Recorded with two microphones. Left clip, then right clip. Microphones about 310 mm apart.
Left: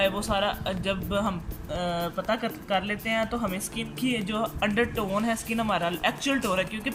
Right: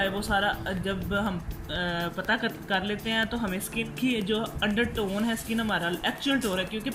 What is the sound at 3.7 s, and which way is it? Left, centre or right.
Speech, left.